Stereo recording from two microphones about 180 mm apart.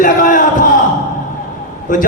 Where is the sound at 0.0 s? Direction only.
45° left (ahead or behind).